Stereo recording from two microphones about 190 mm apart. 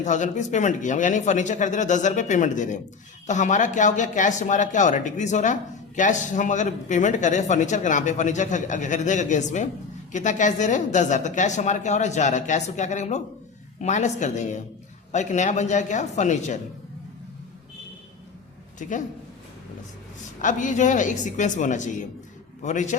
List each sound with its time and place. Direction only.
0.0 s speech: 40° left (ahead or behind)
18.8 s speech: 40° left (ahead or behind)
20.4 s speech: 40° left (ahead or behind)